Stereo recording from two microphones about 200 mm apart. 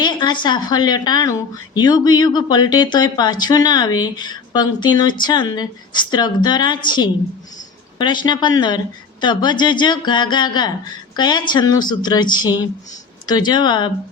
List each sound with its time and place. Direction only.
0.0 s speech: 20° left (ahead or behind)